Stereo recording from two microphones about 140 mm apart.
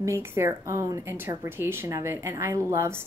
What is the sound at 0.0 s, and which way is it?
Speech, 20° right (ahead or behind).